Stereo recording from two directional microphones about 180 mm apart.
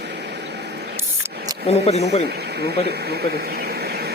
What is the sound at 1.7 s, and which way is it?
Speech, 35° left (ahead or behind).